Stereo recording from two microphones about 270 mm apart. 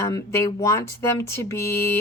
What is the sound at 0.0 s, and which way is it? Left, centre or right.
Speech, centre.